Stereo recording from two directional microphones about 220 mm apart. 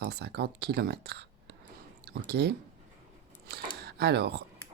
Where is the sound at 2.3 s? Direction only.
50° right (ahead or behind).